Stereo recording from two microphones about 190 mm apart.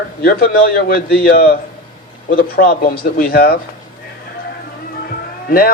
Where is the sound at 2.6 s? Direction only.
45° left (ahead or behind).